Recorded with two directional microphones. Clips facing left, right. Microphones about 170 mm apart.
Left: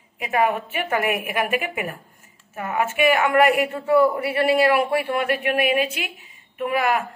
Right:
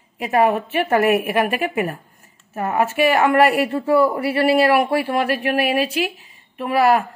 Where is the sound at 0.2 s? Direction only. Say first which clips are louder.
Right 4 dB; 35° right (ahead or behind).